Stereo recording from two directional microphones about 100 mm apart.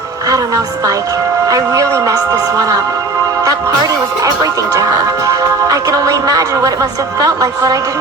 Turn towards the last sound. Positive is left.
turn(degrees=-35)  # may be behind; listen again after turning